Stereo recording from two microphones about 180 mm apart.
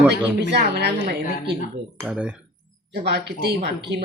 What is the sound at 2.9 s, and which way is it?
Speech, 65° right (ahead or behind).